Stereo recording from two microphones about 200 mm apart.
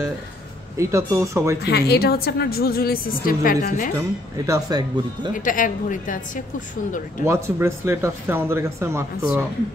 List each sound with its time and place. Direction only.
0.7 s speech: 15° right (ahead or behind)
1.6 s a woman's voice: 55° left (ahead or behind)
4.5 s speech: 20° right (ahead or behind)
5.3 s a woman's voice: 40° left (ahead or behind)
7.2 s speech: 15° right (ahead or behind)